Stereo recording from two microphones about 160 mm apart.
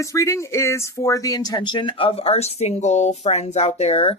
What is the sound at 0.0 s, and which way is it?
Speech, 20° left (ahead or behind).